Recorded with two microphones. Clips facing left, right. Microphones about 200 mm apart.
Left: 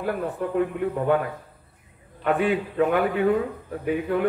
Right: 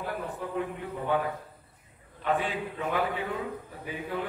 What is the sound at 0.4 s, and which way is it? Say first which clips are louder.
Speech: left 8 dB; 55° left (ahead or behind).